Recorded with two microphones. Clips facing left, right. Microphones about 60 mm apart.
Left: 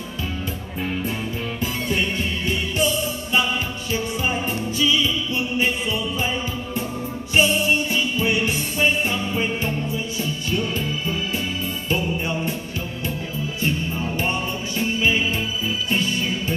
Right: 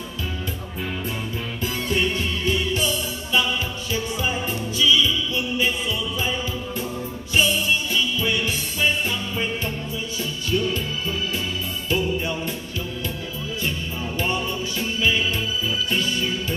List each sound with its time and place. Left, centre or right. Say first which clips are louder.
1.6 s music: right 1 dB; centre
3.9 s music: left 2 dB; left
13.6 s music: left 4 dB; left